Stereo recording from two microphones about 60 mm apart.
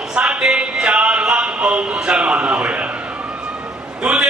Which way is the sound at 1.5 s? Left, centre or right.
Centre.